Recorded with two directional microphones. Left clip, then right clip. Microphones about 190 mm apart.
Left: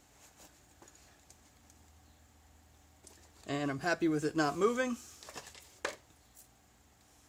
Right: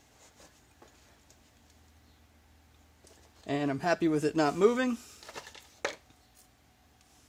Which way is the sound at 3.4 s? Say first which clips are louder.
Right 4 dB; 30° right (ahead or behind).